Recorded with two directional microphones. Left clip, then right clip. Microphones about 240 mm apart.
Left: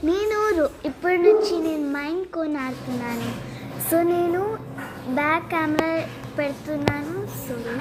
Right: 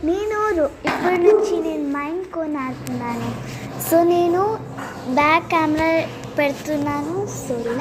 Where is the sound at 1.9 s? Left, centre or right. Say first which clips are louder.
Right 2 dB; centre.